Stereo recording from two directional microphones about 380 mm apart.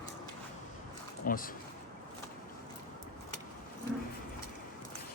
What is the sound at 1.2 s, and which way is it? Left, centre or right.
Speech, left.